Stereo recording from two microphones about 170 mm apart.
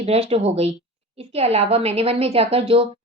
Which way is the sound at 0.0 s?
35° right (ahead or behind).